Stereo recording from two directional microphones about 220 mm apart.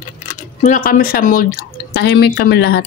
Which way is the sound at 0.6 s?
40° left (ahead or behind).